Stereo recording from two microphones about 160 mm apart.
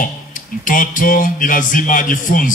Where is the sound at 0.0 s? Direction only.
55° left (ahead or behind).